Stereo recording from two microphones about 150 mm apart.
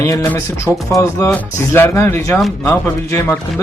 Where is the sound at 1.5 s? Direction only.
15° left (ahead or behind).